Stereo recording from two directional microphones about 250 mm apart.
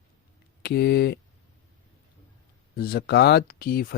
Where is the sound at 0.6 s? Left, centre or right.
Left.